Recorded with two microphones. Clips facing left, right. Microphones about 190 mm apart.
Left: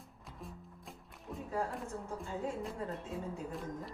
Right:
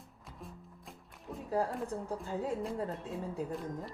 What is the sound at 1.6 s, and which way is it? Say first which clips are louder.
Speech: right 4 dB; 35° right (ahead or behind).